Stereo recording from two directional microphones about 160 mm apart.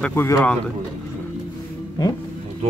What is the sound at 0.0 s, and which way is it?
Speech, 15° left (ahead or behind).